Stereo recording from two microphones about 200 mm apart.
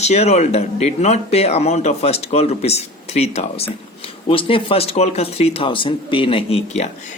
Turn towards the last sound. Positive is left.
turn(degrees=30)  # may be behind; listen again after turning